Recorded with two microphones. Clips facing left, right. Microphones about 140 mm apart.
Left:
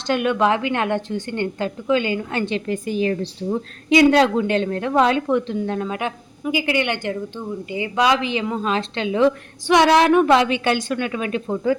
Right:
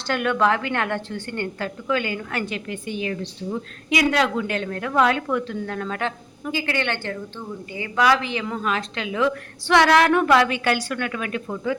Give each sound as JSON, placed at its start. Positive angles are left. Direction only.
{"t": 0.1, "sound": "a woman's voice", "side_deg": 20}
{"t": 2.6, "sound": "a woman's voice", "side_deg": 40}